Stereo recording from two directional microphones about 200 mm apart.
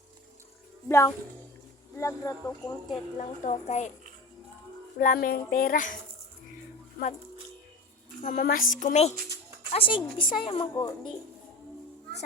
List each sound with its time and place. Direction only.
0.9 s speech: 15° left (ahead or behind)
3.2 s a woman's voice: 35° left (ahead or behind)
4.9 s speech: 45° left (ahead or behind)
8.2 s a woman's voice: 40° left (ahead or behind)
9.7 s a woman's voice: 25° left (ahead or behind)
10.8 s speech: 15° left (ahead or behind)